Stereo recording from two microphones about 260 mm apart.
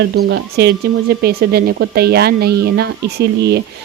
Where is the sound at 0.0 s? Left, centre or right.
Right.